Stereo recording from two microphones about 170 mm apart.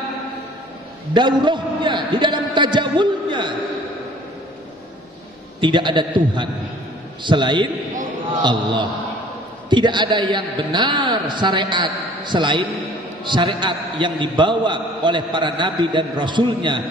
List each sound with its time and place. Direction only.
1.1 s a man's voice: 25° right (ahead or behind)
5.6 s a man's voice: 25° right (ahead or behind)